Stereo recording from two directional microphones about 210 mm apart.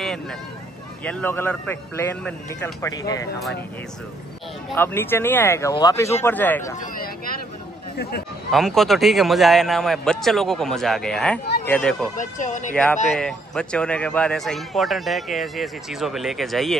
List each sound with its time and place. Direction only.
1.0 s speech: 10° left (ahead or behind)
4.7 s speech: 10° left (ahead or behind)
8.5 s a man's voice: centre (ahead or behind)
12.2 s speech: 35° left (ahead or behind)
12.7 s a man's voice: 5° left (ahead or behind)